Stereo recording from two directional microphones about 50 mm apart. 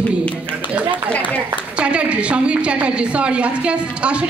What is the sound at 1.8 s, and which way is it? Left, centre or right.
A woman's voice, right.